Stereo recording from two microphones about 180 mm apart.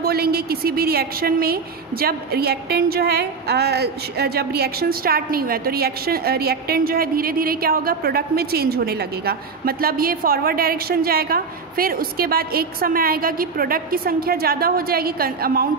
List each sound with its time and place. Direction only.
0.0 s a woman's voice: 60° right (ahead or behind)